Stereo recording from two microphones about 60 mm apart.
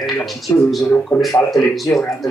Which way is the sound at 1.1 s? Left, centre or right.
Left.